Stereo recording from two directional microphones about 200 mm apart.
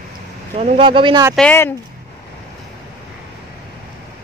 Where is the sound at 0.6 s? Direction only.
30° right (ahead or behind).